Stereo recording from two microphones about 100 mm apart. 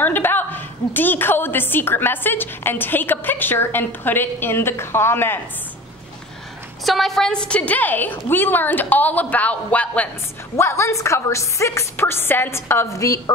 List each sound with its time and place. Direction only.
0.0 s a woman's voice: 20° left (ahead or behind)
6.8 s a woman's voice: centre (ahead or behind)
10.5 s a woman's voice: 30° left (ahead or behind)